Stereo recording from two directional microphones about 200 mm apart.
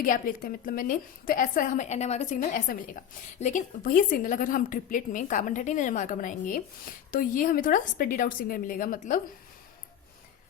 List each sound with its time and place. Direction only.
0.0 s a woman's voice: 45° left (ahead or behind)